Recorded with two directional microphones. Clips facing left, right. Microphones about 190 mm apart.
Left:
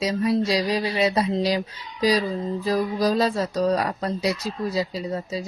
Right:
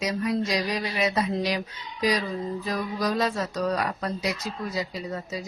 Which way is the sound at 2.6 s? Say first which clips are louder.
Left 8 dB; 35° left (ahead or behind).